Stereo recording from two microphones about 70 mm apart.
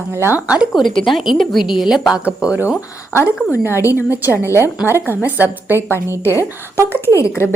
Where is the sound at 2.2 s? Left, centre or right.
Centre.